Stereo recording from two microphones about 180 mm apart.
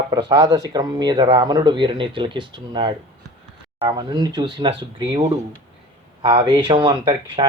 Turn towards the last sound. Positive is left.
turn(degrees=-25)  # may be behind; listen again after turning